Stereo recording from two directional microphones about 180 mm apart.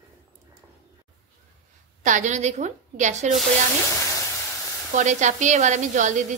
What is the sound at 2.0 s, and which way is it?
A woman's voice, 45° right (ahead or behind).